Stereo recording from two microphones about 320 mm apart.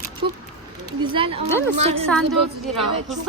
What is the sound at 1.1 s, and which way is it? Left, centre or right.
Speech, centre.